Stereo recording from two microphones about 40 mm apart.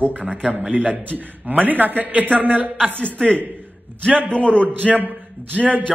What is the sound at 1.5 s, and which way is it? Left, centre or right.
A man's voice, right.